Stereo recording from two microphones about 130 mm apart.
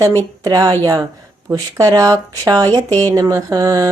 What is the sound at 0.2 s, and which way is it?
Speech, 25° right (ahead or behind).